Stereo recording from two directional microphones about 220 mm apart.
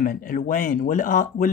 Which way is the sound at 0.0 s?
40° left (ahead or behind).